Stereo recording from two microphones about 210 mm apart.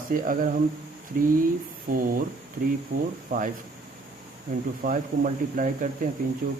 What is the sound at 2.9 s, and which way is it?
Speech, 50° right (ahead or behind).